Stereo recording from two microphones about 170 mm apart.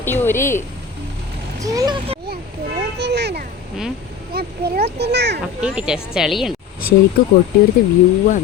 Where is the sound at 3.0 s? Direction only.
80° right.